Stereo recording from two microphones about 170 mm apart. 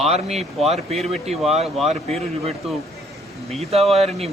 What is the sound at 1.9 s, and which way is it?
Speech, 40° right (ahead or behind).